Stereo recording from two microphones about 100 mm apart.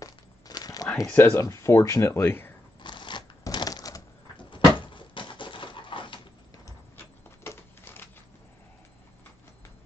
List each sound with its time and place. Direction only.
0.0 s crumpling: 35° left (ahead or behind)
1.0 s speech: 20° left (ahead or behind)
1.4 s speech: 30° left (ahead or behind)
2.8 s a sound: 50° left (ahead or behind)
3.4 s typewriter: 40° left (ahead or behind)
4.4 s dog: 55° left (ahead or behind)
7.0 s a sound: 25° left (ahead or behind)